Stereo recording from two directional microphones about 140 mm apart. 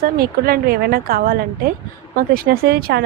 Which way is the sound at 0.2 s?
90° right.